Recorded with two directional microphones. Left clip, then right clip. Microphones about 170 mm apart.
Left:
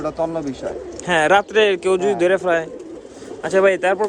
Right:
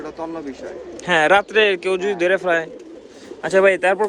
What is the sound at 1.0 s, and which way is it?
Speech, 10° left (ahead or behind).